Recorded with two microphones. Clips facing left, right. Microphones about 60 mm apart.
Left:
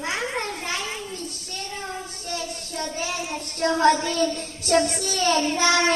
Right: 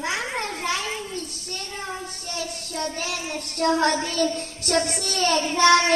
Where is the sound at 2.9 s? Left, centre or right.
Right.